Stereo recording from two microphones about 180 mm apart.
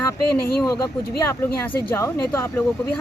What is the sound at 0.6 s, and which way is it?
Speech, 20° left (ahead or behind).